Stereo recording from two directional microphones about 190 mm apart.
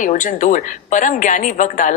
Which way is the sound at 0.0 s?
45° left (ahead or behind).